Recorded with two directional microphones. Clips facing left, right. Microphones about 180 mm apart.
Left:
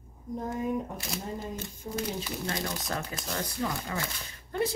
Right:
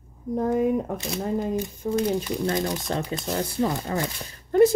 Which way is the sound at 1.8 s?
80° right.